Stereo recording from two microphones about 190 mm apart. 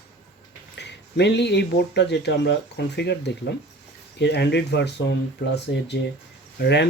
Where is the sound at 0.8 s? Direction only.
65° left (ahead or behind).